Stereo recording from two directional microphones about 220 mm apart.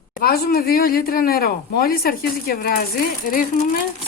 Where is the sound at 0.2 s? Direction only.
45° left (ahead or behind).